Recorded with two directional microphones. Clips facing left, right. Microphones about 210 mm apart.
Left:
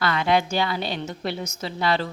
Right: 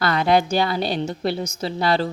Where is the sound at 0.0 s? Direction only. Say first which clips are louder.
Right 3 dB; 40° right (ahead or behind).